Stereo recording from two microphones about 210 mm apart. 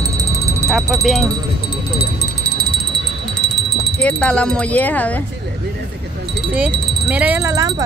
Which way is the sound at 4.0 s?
5° left (ahead or behind).